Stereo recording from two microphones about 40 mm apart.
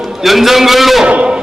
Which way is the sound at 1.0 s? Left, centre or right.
Right.